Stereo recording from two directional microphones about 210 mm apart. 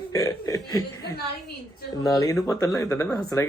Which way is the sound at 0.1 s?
15° left (ahead or behind).